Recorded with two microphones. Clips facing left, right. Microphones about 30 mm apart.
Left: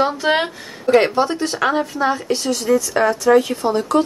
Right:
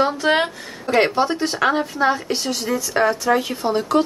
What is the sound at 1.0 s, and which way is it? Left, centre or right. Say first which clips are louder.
A woman's voice: right 1 dB; centre.